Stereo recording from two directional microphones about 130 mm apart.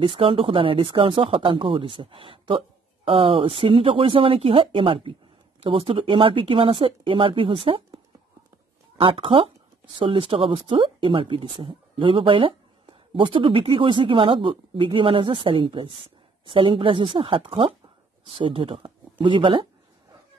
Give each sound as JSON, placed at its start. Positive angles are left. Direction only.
{"t": 0.0, "sound": "speech", "side_deg": -40}
{"t": 8.9, "sound": "speech", "side_deg": -45}